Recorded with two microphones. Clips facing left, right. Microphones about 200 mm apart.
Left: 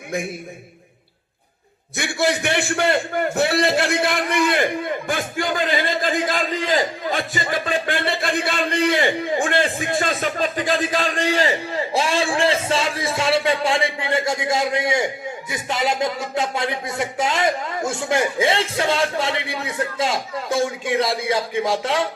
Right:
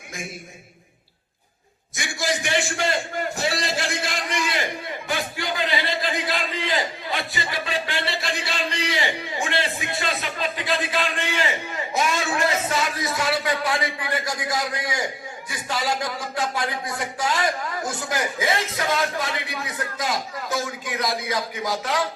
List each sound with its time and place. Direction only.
2.0 s a man's voice: 60° left (ahead or behind); by 22.0 s 25° left (ahead or behind)